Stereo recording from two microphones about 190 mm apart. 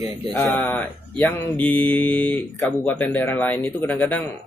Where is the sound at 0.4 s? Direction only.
10° left (ahead or behind).